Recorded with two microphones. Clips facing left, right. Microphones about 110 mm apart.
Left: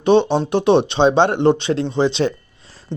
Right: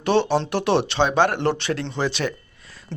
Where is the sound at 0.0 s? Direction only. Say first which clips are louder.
Left 5 dB; 20° left (ahead or behind).